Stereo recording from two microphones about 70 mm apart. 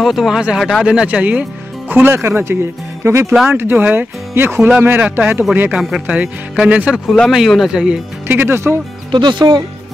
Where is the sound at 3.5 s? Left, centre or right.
Right.